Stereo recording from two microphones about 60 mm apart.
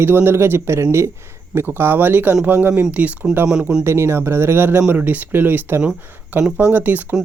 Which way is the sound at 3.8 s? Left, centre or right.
Right.